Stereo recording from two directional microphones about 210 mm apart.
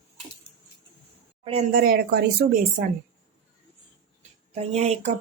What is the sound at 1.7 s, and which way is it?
Speech, 45° right (ahead or behind).